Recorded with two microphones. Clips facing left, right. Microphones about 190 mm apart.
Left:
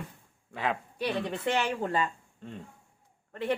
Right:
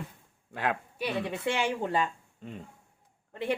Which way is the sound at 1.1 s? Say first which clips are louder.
Even; 10° right (ahead or behind).